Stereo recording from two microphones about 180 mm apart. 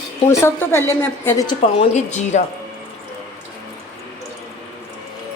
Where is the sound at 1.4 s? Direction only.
35° left (ahead or behind).